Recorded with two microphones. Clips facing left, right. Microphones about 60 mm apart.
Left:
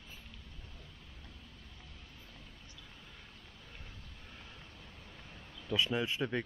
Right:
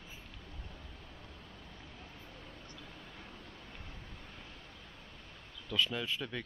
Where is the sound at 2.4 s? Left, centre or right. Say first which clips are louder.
Right 5 dB; right.